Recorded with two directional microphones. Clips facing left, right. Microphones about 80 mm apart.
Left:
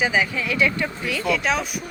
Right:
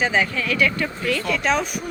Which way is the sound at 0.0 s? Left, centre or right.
Centre.